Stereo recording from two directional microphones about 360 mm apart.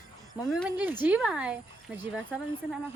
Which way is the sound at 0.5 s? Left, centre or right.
Centre.